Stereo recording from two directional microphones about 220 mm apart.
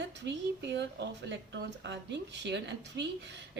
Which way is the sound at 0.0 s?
55° right (ahead or behind).